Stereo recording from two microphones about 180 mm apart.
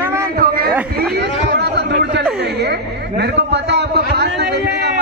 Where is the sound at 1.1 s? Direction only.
65° right (ahead or behind).